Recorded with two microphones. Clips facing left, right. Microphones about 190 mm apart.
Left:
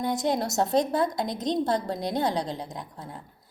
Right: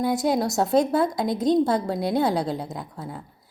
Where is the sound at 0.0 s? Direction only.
5° right (ahead or behind).